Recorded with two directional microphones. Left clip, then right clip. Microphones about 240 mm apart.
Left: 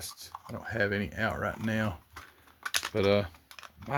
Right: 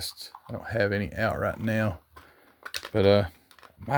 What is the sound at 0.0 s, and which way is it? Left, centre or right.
Speech, right.